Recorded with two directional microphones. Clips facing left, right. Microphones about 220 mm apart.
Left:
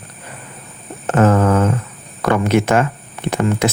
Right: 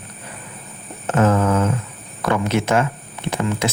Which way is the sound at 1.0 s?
60° left (ahead or behind).